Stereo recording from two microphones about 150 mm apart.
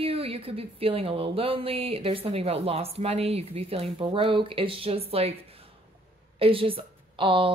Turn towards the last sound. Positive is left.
turn(degrees=-35)  # may be behind; listen again after turning